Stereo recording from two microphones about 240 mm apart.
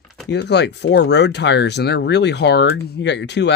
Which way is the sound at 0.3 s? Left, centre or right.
Left.